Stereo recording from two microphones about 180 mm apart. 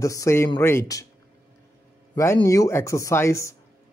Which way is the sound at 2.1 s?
15° left (ahead or behind).